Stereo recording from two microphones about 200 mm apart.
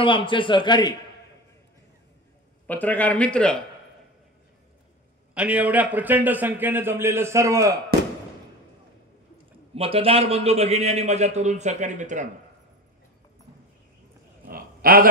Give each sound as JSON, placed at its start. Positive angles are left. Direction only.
{"t": 0.0, "sound": "a man's voice", "side_deg": 25}
{"t": 2.6, "sound": "a man's voice", "side_deg": 10}
{"t": 5.3, "sound": "a man's voice", "side_deg": -5}
{"t": 9.8, "sound": "a man's voice", "side_deg": -30}
{"t": 14.5, "sound": "a sound", "side_deg": -45}